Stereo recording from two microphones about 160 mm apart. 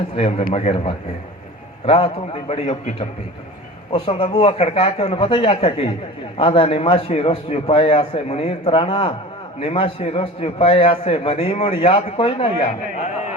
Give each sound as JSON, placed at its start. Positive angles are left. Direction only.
{"t": 0.2, "sound": "a man's voice", "side_deg": 40}
{"t": 3.9, "sound": "a man's voice", "side_deg": 35}